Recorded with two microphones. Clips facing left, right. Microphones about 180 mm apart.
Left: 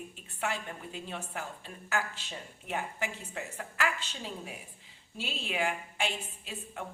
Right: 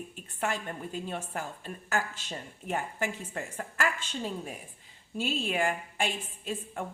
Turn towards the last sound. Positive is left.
turn(degrees=-45)  # may be behind; listen again after turning